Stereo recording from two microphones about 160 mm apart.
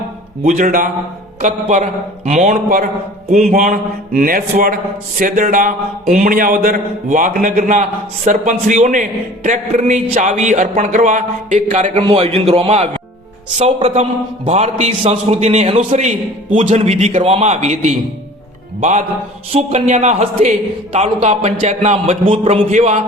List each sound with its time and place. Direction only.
0.4 s a man's voice: 55° right (ahead or behind)
12.0 s a man's voice: 35° right (ahead or behind)